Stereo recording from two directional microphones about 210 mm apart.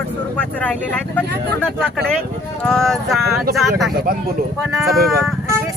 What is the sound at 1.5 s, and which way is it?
Speech, 5° left (ahead or behind).